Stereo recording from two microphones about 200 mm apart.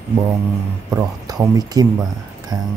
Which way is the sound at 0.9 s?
15° right (ahead or behind).